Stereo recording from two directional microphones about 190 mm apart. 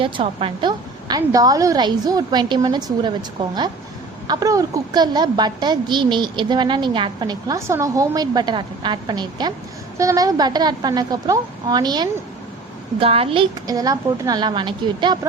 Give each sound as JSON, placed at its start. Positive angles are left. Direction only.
{"t": 0.0, "sound": "a woman's voice", "side_deg": -30}